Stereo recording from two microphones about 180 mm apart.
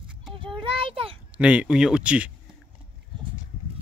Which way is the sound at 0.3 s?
30° right (ahead or behind).